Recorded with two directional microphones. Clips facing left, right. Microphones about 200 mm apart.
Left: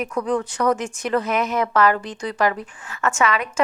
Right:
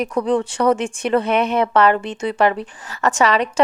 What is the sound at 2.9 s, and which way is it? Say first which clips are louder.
Speech: right 4 dB; 35° right (ahead or behind).